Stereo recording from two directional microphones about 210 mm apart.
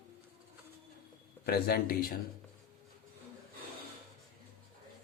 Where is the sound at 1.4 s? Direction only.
50° left (ahead or behind).